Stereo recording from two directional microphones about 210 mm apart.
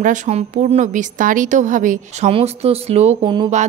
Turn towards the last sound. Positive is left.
turn(degrees=-25)  # may be behind; listen again after turning